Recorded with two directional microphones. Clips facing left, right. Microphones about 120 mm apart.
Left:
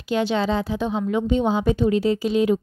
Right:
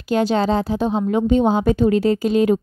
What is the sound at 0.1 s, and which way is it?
A woman's voice, 40° right (ahead or behind).